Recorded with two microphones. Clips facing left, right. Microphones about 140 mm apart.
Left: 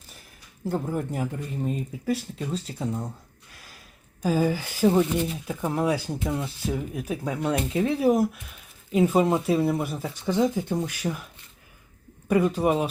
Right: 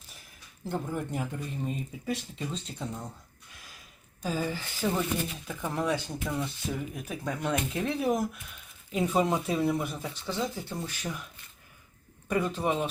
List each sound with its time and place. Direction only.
0.6 s speech: 5° left (ahead or behind)
3.5 s a sound: centre (ahead or behind)
4.2 s speech: 10° left (ahead or behind)
4.9 s speech: 30° left (ahead or behind)
5.7 s speech: 10° left (ahead or behind)
10.2 s speech: 45° left (ahead or behind)
10.5 s speech: 20° left (ahead or behind)
12.3 s speech: 10° left (ahead or behind)